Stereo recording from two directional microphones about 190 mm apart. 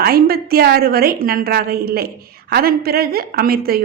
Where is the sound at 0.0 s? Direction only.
55° right (ahead or behind).